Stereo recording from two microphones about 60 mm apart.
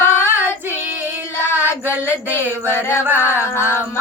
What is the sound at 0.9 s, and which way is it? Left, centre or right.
Female singing, right.